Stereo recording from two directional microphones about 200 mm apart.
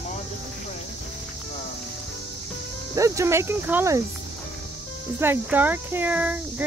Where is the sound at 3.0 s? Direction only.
15° right (ahead or behind).